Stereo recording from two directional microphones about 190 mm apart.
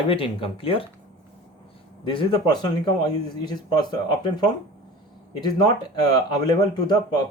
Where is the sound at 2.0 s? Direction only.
25° left (ahead or behind).